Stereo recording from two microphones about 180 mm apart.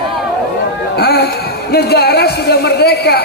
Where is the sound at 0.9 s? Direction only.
60° left (ahead or behind).